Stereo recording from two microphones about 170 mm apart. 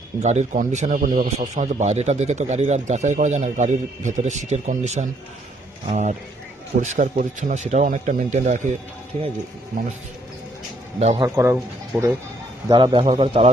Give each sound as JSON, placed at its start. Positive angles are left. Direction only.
{"t": 0.2, "sound": "speech", "side_deg": -40}
{"t": 11.0, "sound": "a man's voice", "side_deg": -35}
{"t": 11.3, "sound": "speech", "side_deg": -15}
{"t": 12.6, "sound": "a man's voice", "side_deg": -30}